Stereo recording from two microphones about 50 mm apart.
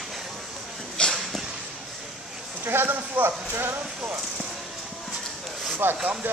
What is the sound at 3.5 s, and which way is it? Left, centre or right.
Speech, right.